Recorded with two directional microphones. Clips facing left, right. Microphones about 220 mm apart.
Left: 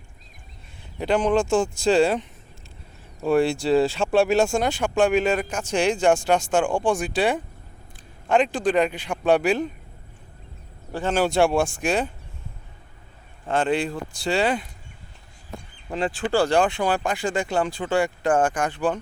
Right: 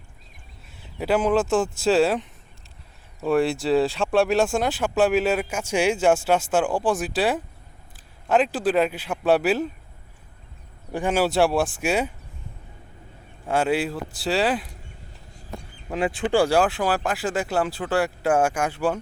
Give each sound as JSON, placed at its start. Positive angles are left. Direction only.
{"t": 0.9, "sound": "speech", "side_deg": -5}
{"t": 10.9, "sound": "speech", "side_deg": -10}
{"t": 13.5, "sound": "speech", "side_deg": -10}
{"t": 15.9, "sound": "speech", "side_deg": -5}